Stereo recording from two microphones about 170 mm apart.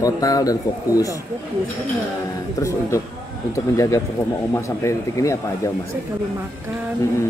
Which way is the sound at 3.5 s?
20° left (ahead or behind).